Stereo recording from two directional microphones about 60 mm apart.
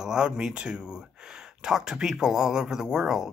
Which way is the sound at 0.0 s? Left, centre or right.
Centre.